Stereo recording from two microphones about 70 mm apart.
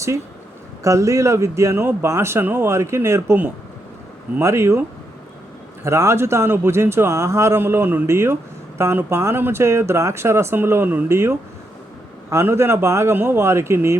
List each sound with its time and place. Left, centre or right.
0.9 s speech: right
4.4 s speech: right
5.8 s speech: right
7.6 s a man's voice: right